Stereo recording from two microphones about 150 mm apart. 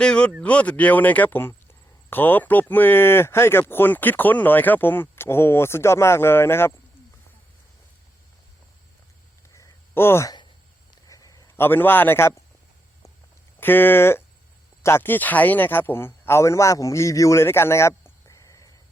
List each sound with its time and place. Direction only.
0.0 s speech: 5° left (ahead or behind)
9.6 s a sound: 15° left (ahead or behind)
13.6 s speech: 15° left (ahead or behind)